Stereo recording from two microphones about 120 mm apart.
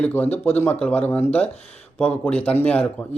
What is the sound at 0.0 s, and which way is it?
Speech, 15° left (ahead or behind).